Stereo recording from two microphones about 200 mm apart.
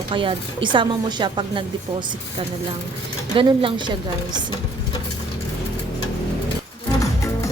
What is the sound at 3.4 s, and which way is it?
Speech, 25° right (ahead or behind).